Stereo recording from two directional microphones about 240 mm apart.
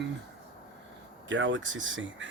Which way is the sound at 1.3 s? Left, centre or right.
Right.